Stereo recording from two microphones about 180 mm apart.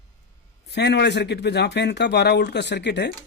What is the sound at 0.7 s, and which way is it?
Speech, 70° left (ahead or behind).